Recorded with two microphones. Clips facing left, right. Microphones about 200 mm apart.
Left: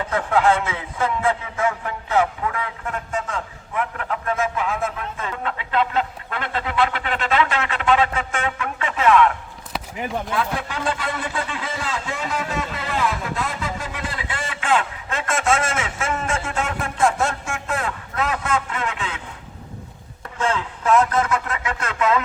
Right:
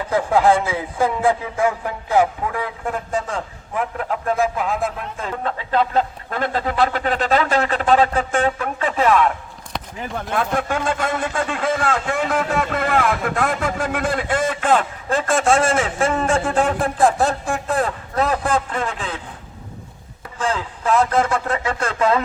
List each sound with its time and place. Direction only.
0.1 s a man's voice: 35° right (ahead or behind)
10.3 s a man's voice: 50° right (ahead or behind)
20.4 s a man's voice: 35° right (ahead or behind)